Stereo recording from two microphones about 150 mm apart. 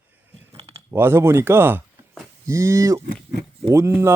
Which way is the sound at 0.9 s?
15° right (ahead or behind).